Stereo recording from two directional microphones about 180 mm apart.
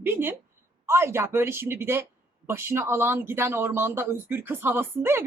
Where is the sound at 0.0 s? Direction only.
10° right (ahead or behind).